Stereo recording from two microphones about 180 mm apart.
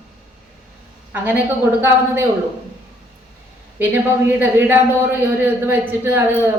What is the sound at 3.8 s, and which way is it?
A man's voice, 10° right (ahead or behind).